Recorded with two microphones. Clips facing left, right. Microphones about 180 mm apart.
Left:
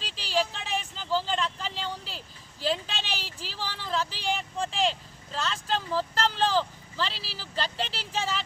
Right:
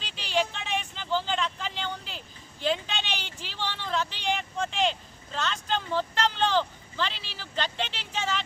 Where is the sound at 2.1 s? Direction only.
Centre (ahead or behind).